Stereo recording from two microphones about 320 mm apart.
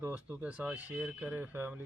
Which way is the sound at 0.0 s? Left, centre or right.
Centre.